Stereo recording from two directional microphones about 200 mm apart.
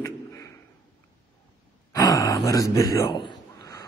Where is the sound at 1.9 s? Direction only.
15° left (ahead or behind).